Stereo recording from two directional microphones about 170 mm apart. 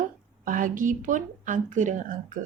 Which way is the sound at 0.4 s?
50° right (ahead or behind).